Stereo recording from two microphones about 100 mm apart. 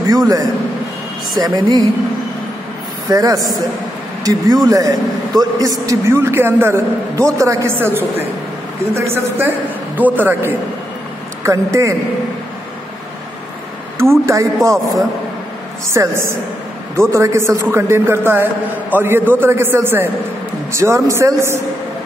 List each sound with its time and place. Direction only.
0.1 s a man's voice: 40° right (ahead or behind)
3.1 s a man's voice: 35° right (ahead or behind); by 10.5 s 20° right (ahead or behind)
11.4 s a man's voice: 30° right (ahead or behind)
13.9 s a man's voice: 25° right (ahead or behind)
15.9 s a man's voice: 25° right (ahead or behind)